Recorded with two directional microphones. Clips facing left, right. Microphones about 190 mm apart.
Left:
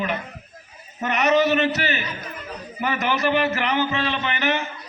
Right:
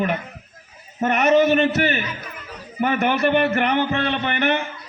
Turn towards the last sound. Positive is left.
turn(degrees=-55)  # may be behind; listen again after turning